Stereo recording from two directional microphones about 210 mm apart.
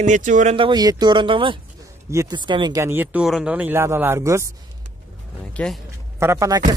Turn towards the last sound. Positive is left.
turn(degrees=-15)  # may be behind; listen again after turning